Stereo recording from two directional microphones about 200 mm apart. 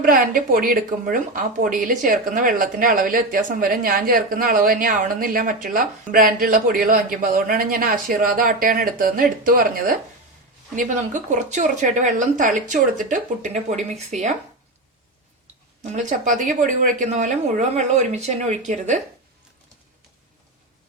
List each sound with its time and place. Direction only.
0.0 s speech: 45° right (ahead or behind)
15.8 s speech: 35° right (ahead or behind)